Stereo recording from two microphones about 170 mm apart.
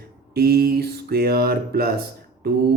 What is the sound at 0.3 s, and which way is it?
A man's voice, 65° right (ahead or behind).